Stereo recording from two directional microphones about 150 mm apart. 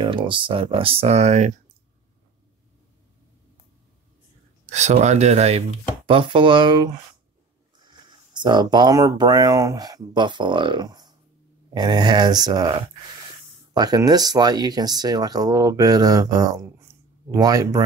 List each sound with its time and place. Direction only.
0.0 s speech: 30° right (ahead or behind); by 1.5 s 50° right (ahead or behind)
4.7 s speech: 50° right (ahead or behind)
6.0 s speech: 35° right (ahead or behind)